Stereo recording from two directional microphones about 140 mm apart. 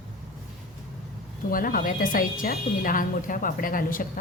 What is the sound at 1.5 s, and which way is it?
Speech, 90° left.